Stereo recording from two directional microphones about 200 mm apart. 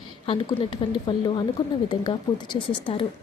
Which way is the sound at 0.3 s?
25° left (ahead or behind).